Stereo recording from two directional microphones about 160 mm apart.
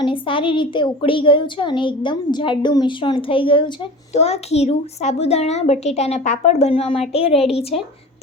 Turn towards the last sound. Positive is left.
turn(degrees=40)  # may be behind; listen again after turning